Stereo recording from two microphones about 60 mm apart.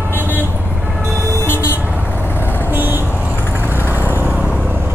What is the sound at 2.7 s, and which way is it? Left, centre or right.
Vehicle, right.